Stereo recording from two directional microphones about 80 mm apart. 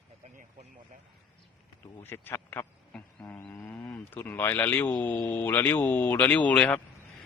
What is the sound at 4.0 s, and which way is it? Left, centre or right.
Speech, left.